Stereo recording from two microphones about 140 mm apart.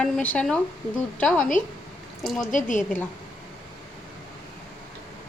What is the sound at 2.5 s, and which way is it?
Speech, 65° left (ahead or behind).